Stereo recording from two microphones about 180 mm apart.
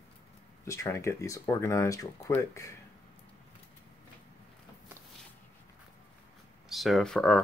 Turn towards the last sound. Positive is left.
turn(degrees=5)  # may be behind; listen again after turning